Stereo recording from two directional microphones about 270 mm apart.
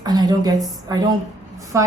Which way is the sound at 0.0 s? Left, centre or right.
Centre.